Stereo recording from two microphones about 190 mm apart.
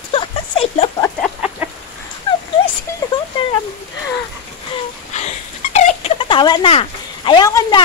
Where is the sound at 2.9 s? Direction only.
15° left (ahead or behind).